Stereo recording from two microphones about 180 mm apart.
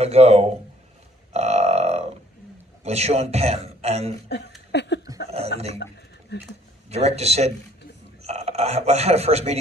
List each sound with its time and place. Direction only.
0.0 s a man's voice: 35° right (ahead or behind)
1.3 s a sound: 35° right (ahead or behind)
2.8 s a man's voice: 35° right (ahead or behind)
4.7 s a sound: 70° left (ahead or behind)
6.3 s speech: 65° left (ahead or behind)
6.9 s a man's voice: 35° right (ahead or behind)